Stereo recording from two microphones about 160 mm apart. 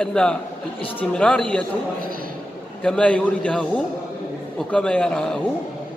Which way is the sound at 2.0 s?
65° right (ahead or behind).